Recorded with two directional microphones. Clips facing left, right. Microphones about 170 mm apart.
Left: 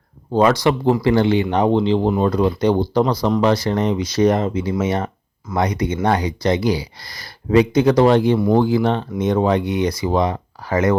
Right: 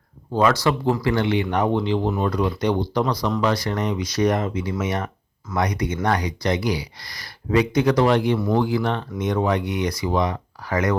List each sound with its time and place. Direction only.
0.3 s speech: 20° left (ahead or behind)
1.0 s speech: 30° left (ahead or behind)